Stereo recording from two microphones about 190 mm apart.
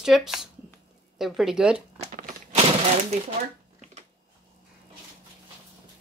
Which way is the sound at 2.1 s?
45° right (ahead or behind).